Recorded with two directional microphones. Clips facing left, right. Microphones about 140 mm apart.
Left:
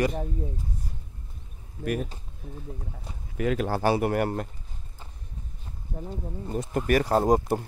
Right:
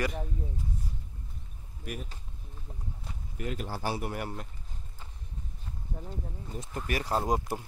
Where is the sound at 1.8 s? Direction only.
60° left (ahead or behind).